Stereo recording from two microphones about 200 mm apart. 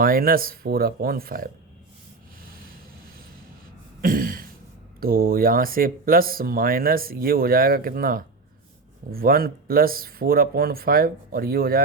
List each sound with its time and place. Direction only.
0.0 s speech: 45° right (ahead or behind)
4.0 s a sound: 45° right (ahead or behind)
4.9 s speech: 45° right (ahead or behind)